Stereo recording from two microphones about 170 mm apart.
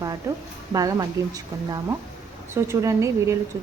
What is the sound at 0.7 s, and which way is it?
A woman's voice, 20° right (ahead or behind).